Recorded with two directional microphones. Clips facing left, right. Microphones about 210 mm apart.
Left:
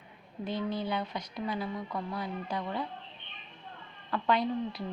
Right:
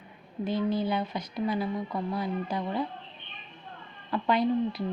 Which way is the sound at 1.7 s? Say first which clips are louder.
Right 4 dB; 25° right (ahead or behind).